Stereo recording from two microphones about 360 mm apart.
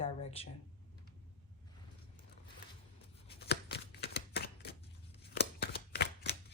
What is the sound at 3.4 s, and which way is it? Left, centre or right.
Shuffling cards, left.